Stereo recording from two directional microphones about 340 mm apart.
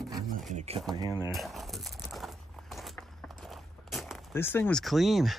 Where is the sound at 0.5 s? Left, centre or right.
Centre.